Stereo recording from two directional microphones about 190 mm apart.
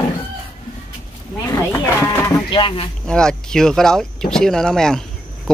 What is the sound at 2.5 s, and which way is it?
Speech, 25° left (ahead or behind).